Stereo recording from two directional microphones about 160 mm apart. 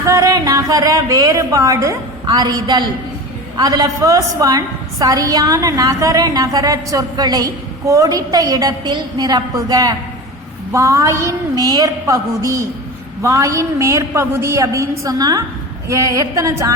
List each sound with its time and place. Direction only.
0.0 s a woman's voice: 20° right (ahead or behind)